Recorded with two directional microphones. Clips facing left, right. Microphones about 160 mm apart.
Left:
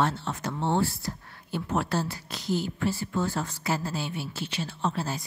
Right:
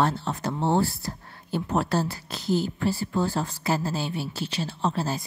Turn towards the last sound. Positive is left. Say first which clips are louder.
# right 3 dB
turn(degrees=-35)  # may be behind; listen again after turning